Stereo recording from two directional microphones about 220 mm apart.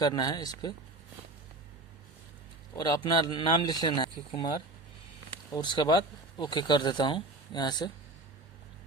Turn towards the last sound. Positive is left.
turn(degrees=20)  # may be behind; listen again after turning